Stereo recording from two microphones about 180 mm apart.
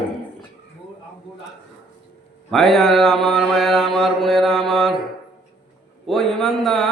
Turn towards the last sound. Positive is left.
turn(degrees=0)  # may be behind; listen again after turning